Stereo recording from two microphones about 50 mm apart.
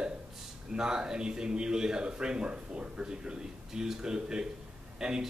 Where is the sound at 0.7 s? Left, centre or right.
Centre.